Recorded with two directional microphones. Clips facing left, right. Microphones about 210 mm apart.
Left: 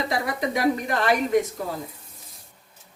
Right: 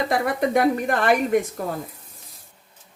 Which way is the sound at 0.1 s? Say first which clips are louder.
Right 5 dB; 55° right (ahead or behind).